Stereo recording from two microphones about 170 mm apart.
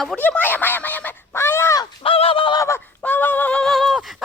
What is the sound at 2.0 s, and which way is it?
Fowl, 35° left (ahead or behind).